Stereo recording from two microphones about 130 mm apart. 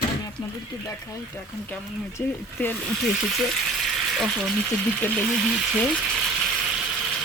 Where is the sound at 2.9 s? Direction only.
Centre (ahead or behind).